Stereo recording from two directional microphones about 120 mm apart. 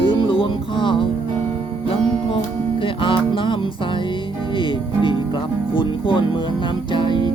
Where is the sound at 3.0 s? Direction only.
45° left (ahead or behind).